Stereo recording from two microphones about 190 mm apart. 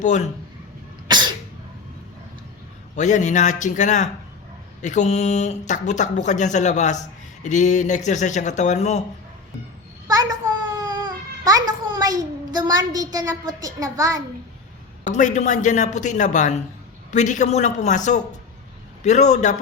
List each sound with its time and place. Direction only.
0.0 s speech: 40° left (ahead or behind)
1.0 s cough: 25° right (ahead or behind)
2.9 s speech: 40° left (ahead or behind)
10.1 s a sound: 20° right (ahead or behind)
10.8 s a child's voice: 20° right (ahead or behind)
15.1 s speech: 40° left (ahead or behind)